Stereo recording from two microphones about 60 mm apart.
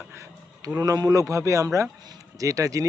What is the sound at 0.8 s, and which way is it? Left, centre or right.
Speech, right.